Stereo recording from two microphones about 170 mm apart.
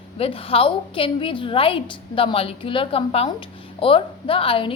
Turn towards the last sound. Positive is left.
turn(degrees=30)  # may be behind; listen again after turning